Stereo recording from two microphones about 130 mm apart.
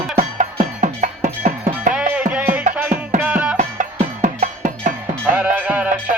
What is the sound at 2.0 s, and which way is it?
Music, 10° right (ahead or behind).